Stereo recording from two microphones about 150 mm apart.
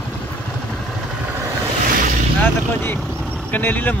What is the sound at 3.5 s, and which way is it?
Speech, 10° left (ahead or behind).